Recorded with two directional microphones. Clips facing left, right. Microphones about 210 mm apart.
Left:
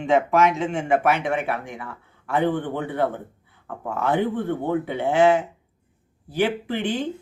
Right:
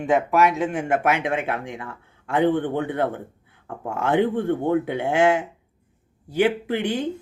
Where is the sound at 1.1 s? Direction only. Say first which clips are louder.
Even; 15° right (ahead or behind).